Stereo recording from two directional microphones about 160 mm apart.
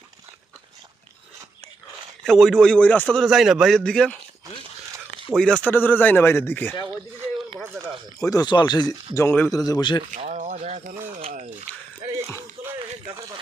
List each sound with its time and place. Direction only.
2.2 s a man's voice: centre (ahead or behind)
5.4 s speech: 5° left (ahead or behind)
8.2 s speech: 25° left (ahead or behind)
9.1 s speech: 15° left (ahead or behind)
10.2 s a sound: 45° right (ahead or behind)